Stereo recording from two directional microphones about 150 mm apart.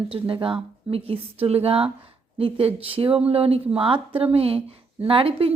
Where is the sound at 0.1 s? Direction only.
35° right (ahead or behind).